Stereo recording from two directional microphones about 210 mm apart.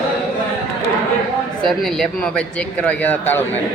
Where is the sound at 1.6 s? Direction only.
Centre (ahead or behind).